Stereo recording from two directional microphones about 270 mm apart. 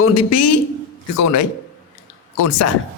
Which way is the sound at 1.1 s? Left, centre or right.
Left.